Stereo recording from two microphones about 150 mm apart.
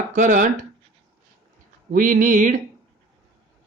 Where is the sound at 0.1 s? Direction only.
55° right (ahead or behind).